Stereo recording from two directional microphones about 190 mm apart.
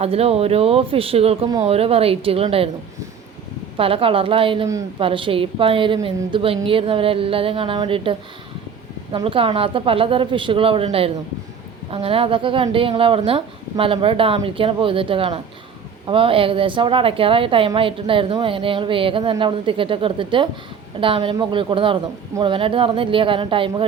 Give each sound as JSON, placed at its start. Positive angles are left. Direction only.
{"t": 0.0, "sound": "speech", "side_deg": -30}
{"t": 3.8, "sound": "a woman's voice", "side_deg": -30}
{"t": 9.1, "sound": "a woman's voice", "side_deg": -30}